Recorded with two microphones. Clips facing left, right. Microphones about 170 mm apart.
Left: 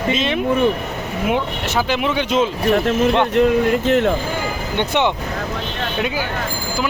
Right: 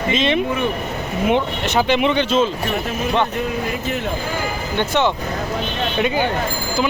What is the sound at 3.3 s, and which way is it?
Speech, 90° left.